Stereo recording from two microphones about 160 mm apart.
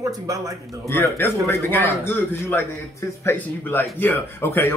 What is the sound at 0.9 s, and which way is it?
Speech, 15° left (ahead or behind).